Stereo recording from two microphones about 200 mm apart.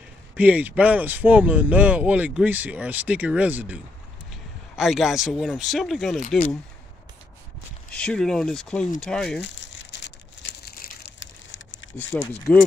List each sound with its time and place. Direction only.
0.4 s speech: 10° right (ahead or behind)
7.9 s speech: 5° left (ahead or behind)
9.4 s crumpling: 65° left (ahead or behind)
12.0 s speech: 10° left (ahead or behind)